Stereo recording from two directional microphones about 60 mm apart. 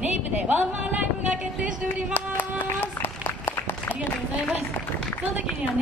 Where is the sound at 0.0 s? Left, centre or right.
Right.